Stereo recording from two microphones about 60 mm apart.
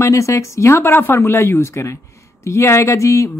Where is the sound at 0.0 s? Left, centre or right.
Left.